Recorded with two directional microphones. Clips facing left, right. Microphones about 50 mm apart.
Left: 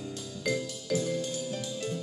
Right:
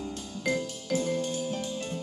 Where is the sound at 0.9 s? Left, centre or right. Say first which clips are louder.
Right 2 dB; right.